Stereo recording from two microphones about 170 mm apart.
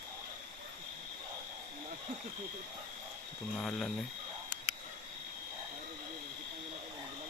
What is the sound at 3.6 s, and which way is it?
Cricket, centre (ahead or behind).